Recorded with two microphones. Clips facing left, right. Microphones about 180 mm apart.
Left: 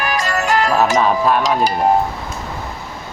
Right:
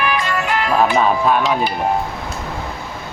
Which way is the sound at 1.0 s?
Centre (ahead or behind).